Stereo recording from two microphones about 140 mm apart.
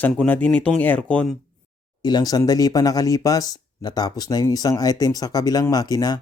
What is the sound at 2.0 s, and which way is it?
Speech, 30° left (ahead or behind).